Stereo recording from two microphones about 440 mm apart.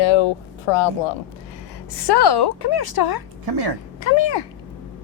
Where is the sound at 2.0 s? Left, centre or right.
Left.